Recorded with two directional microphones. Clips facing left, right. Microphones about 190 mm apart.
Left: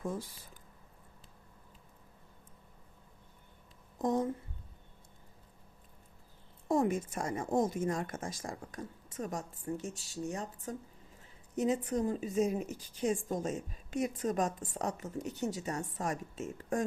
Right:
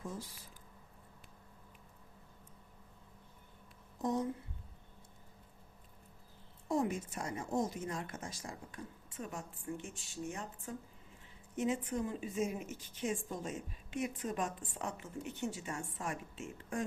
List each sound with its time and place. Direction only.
4.0 s a woman's voice: 50° left (ahead or behind)
6.7 s a woman's voice: 50° left (ahead or behind)